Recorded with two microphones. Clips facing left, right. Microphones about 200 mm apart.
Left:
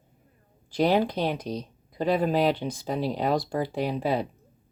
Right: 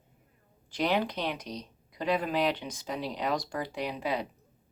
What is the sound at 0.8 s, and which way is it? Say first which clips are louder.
Speech: left 6 dB; 35° left (ahead or behind).